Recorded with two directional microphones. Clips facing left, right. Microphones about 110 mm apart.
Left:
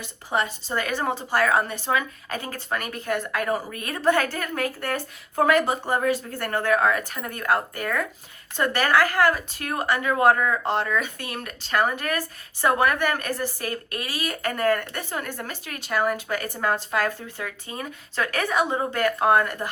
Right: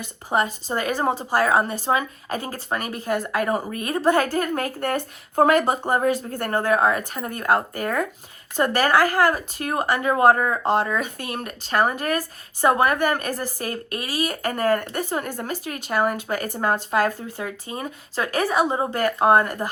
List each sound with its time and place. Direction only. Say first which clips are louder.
0.0 s speech: right 3 dB; 45° right (ahead or behind); by 11.0 s 25° right (ahead or behind)
11.0 s speech: right 3 dB; 40° right (ahead or behind)
17.3 s speech: right 3 dB; 25° right (ahead or behind)